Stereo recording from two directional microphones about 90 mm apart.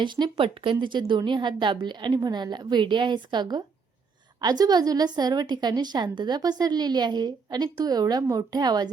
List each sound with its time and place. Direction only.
0.0 s a woman's voice: 60° right (ahead or behind)